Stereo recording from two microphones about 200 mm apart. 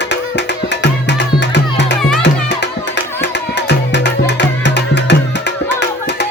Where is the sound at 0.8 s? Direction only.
60° left (ahead or behind).